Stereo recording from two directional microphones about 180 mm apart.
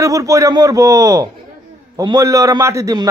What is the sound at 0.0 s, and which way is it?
A man's voice, 20° right (ahead or behind).